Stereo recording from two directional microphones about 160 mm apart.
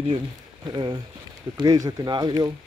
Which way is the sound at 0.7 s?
30° right (ahead or behind).